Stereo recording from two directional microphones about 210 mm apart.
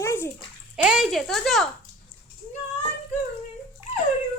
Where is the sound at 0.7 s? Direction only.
5° right (ahead or behind).